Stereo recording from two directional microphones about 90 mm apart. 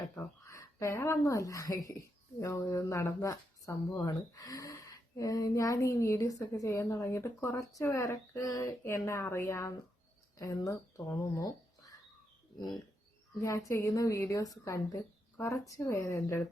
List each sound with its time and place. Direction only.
0.4 s speech: 35° left (ahead or behind)
13.4 s speech: 35° left (ahead or behind)